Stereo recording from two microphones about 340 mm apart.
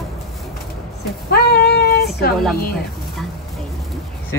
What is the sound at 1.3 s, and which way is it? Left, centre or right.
Child singing, left.